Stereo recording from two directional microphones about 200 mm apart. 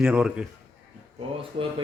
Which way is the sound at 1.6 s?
30° right (ahead or behind).